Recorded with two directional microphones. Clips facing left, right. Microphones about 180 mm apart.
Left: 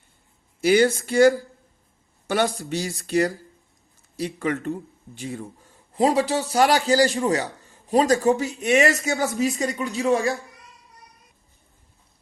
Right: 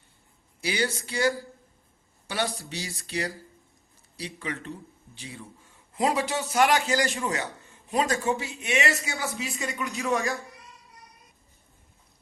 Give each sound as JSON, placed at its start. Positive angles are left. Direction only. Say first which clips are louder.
{"t": 0.6, "sound": "a man's voice", "louder": "left 11 dB", "side_deg": 50}